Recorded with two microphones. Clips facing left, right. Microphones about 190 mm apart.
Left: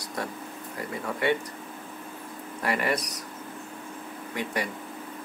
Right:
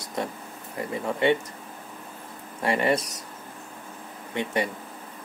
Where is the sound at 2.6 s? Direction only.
25° right (ahead or behind).